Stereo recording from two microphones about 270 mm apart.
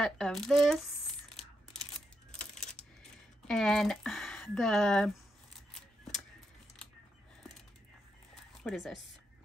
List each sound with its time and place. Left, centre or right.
0.0 s speech: centre
1.3 s a sound: centre
5.8 s scissors: centre
8.6 s speech: centre